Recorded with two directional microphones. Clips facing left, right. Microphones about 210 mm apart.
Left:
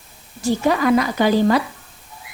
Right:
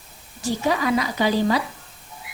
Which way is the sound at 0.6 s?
55° left (ahead or behind).